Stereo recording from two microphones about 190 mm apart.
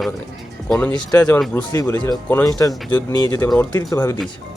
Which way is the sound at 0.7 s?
10° left (ahead or behind).